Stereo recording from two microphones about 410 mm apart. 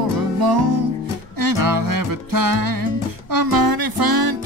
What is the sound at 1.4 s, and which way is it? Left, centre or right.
Music, right.